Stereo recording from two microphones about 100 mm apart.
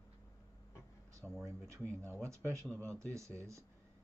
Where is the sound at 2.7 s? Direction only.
15° left (ahead or behind).